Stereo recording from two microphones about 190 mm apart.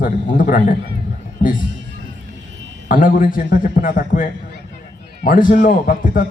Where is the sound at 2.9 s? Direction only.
45° left (ahead or behind).